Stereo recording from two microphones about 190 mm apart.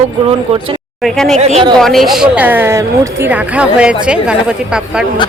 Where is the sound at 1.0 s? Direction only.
Centre (ahead or behind).